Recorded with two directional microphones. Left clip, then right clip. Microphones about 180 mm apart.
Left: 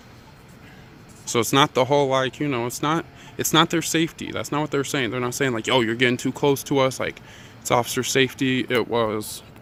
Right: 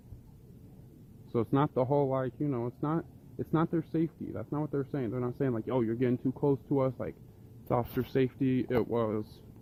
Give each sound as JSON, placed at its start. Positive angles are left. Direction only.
{"t": 1.4, "sound": "speech", "side_deg": 0}
{"t": 1.7, "sound": "speech", "side_deg": 15}
{"t": 6.3, "sound": "speech", "side_deg": 20}
{"t": 6.7, "sound": "speech", "side_deg": 0}